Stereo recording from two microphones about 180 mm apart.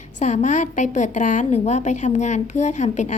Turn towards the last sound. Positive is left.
turn(degrees=40)  # may be behind; listen again after turning